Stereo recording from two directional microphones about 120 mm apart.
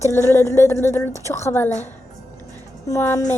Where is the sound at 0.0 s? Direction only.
20° left (ahead or behind).